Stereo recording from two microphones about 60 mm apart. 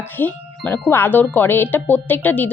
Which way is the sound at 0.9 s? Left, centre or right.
Left.